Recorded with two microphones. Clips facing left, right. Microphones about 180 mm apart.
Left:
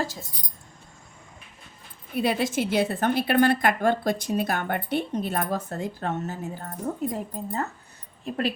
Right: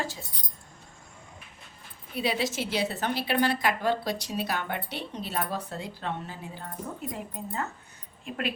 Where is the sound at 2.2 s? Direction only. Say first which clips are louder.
Left 5 dB; 50° left (ahead or behind).